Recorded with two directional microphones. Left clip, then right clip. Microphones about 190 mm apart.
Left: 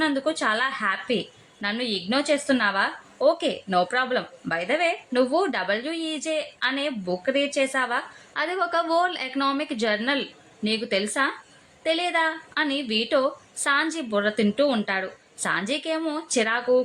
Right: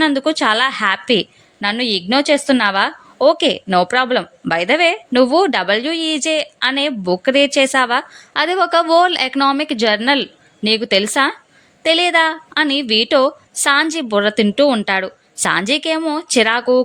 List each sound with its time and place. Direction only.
0.0 s a woman's voice: 40° right (ahead or behind)